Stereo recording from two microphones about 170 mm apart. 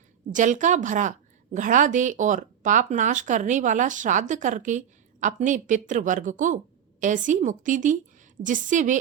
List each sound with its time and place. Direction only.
0.3 s speech: 50° right (ahead or behind)